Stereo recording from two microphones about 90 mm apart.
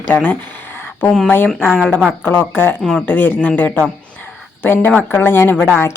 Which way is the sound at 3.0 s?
20° left (ahead or behind).